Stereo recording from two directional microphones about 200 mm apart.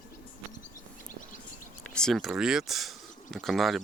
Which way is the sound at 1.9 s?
5° left (ahead or behind).